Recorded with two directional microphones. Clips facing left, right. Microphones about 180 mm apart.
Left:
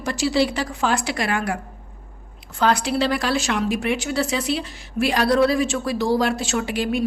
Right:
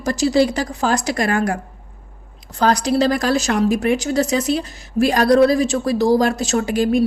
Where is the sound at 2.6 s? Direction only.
40° right (ahead or behind).